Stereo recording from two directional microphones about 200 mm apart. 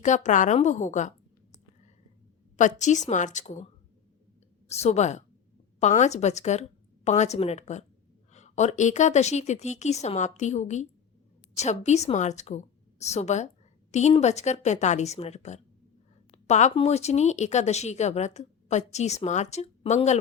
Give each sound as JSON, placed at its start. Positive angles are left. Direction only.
{"t": 0.0, "sound": "speech", "side_deg": 40}
{"t": 2.6, "sound": "speech", "side_deg": 35}
{"t": 4.7, "sound": "speech", "side_deg": 35}